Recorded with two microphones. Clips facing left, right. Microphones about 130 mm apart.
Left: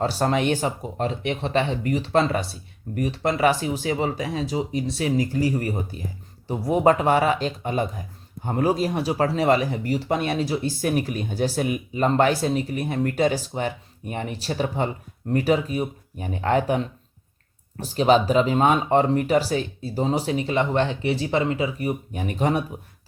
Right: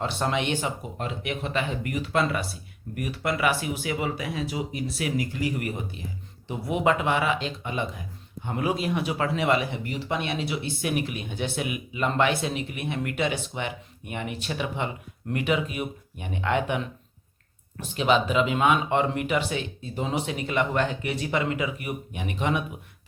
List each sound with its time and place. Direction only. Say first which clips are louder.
0.0 s speech: left 5 dB; 40° left (ahead or behind)